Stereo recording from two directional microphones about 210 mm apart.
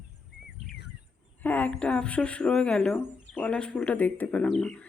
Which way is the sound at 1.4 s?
10° left (ahead or behind).